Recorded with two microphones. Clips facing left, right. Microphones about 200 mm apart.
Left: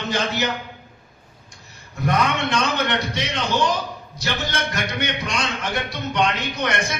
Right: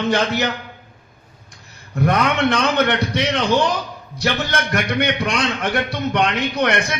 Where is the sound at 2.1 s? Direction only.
60° right (ahead or behind).